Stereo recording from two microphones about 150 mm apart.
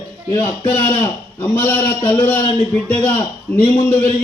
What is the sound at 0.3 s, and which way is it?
A man's voice, 15° left (ahead or behind).